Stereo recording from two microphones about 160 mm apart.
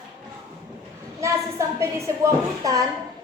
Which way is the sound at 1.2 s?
20° right (ahead or behind).